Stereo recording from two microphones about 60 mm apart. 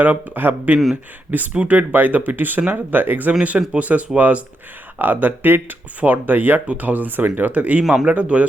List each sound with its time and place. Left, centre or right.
0.0 s speech: right